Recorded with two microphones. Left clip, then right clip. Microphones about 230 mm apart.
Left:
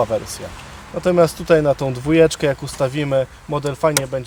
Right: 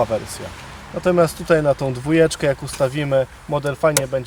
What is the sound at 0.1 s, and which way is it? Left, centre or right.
Speech, centre.